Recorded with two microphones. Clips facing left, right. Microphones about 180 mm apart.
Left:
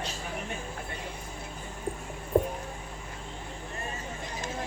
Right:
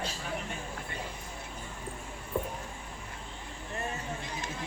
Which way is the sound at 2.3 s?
50° left (ahead or behind).